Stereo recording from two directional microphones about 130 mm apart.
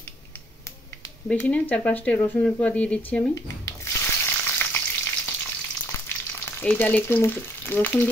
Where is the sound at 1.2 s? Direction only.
10° left (ahead or behind).